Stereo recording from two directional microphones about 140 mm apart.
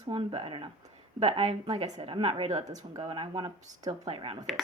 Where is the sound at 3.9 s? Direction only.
45° right (ahead or behind).